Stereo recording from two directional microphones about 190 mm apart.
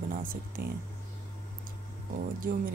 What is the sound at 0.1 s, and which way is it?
Speech, 50° right (ahead or behind).